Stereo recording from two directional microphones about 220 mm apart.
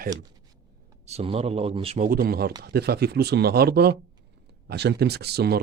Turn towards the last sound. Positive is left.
turn(degrees=-45)  # may be behind; listen again after turning